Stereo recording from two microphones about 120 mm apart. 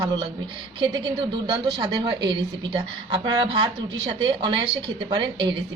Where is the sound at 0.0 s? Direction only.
35° right (ahead or behind).